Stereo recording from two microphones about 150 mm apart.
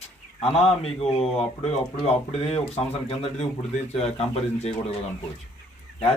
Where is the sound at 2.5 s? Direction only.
45° left (ahead or behind).